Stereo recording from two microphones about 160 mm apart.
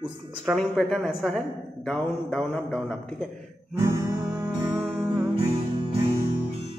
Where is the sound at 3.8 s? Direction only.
25° right (ahead or behind).